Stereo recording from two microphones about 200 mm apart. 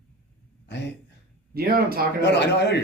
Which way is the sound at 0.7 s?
60° left (ahead or behind).